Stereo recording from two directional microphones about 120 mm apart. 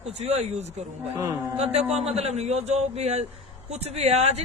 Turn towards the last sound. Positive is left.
turn(degrees=-60)  # may be behind; listen again after turning